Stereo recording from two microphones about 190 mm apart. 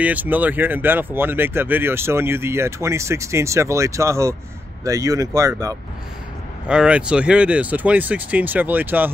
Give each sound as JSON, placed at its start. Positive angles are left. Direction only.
{"t": 0.0, "sound": "speech", "side_deg": -10}
{"t": 6.7, "sound": "speech", "side_deg": -5}